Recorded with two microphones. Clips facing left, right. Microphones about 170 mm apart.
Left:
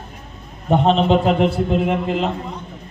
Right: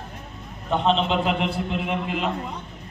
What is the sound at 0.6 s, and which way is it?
A man's voice, 45° left (ahead or behind).